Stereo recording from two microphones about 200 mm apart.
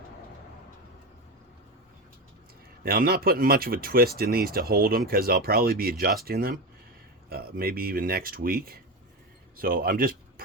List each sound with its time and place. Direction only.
2.8 s speech: 50° right (ahead or behind)